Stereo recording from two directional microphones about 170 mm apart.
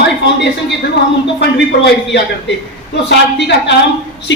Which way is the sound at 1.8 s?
90° left.